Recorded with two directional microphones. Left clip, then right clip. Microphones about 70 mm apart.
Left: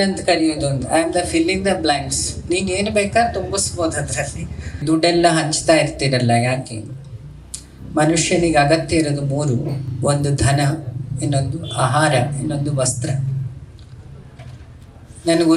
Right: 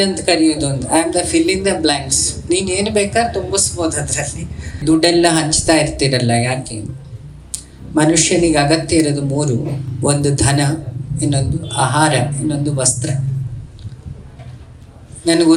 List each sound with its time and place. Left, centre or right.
0.0 s a woman's voice: right
15.2 s a man's voice: right